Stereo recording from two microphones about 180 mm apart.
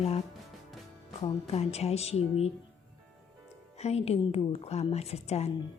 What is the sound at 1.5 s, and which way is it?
Speech, 35° left (ahead or behind).